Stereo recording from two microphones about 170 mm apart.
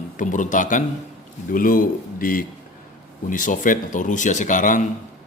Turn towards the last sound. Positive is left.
turn(degrees=50)  # may be behind; listen again after turning